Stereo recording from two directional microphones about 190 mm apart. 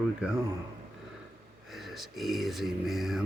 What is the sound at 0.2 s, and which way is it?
Speech, 5° right (ahead or behind).